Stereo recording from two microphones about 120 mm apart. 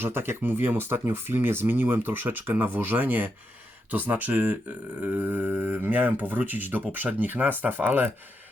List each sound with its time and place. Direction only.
0.0 s speech: 20° right (ahead or behind)